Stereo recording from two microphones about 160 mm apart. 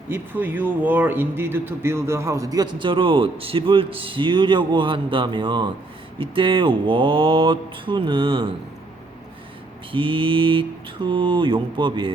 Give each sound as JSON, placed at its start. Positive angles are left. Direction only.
{"t": 0.1, "sound": "speech", "side_deg": -10}
{"t": 9.9, "sound": "speech", "side_deg": -30}